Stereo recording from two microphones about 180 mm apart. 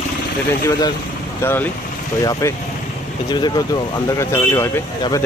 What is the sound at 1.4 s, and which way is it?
Speech, 10° left (ahead or behind).